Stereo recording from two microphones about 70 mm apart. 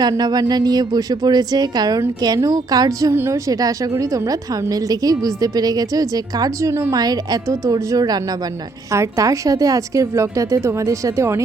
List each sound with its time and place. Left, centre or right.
0.2 s a woman's voice: right
3.1 s a woman's voice: right
3.5 s a woman's voice: right
6.9 s a woman's voice: right
8.9 s a woman's voice: right